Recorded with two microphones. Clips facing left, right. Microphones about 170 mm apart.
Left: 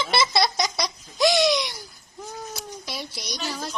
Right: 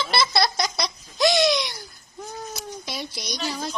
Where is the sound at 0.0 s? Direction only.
15° left (ahead or behind).